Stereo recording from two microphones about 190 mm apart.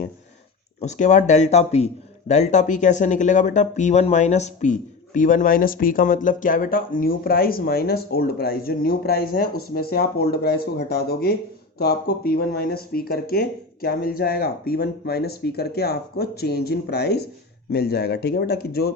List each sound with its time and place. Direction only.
0.8 s speech: 40° left (ahead or behind); by 18.9 s 55° left (ahead or behind)